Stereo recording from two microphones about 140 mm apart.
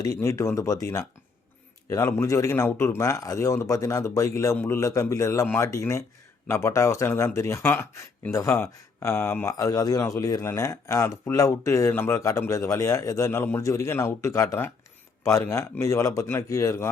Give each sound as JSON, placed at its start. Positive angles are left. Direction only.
{"t": 0.0, "sound": "speech", "side_deg": 25}